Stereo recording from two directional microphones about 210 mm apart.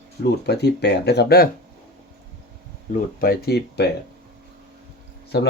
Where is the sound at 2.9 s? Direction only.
45° left (ahead or behind).